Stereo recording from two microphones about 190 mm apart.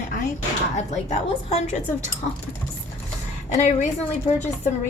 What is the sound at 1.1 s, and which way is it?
Speech, 35° left (ahead or behind).